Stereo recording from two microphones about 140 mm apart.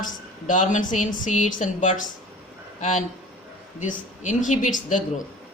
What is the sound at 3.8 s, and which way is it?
Speech, 65° left (ahead or behind).